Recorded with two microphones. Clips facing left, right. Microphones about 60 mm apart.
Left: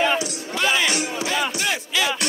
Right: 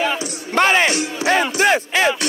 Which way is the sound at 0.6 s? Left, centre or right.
Right.